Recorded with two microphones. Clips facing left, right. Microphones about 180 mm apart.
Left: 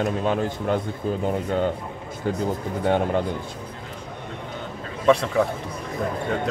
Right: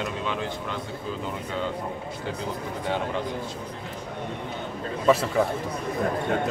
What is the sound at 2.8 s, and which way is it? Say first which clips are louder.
Speech: left 7 dB; 55° left (ahead or behind).